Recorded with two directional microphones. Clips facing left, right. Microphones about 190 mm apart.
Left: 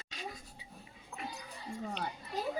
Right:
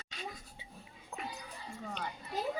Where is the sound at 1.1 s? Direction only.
35° right (ahead or behind).